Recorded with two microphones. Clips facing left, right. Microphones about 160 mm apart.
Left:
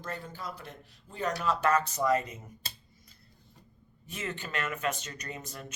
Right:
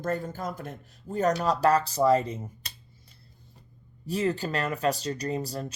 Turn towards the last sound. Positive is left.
turn(degrees=-35)  # may be behind; listen again after turning